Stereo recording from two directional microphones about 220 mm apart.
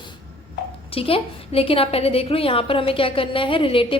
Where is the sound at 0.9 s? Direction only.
25° left (ahead or behind).